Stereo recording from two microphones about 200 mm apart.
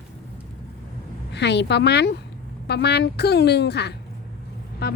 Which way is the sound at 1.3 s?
60° left (ahead or behind).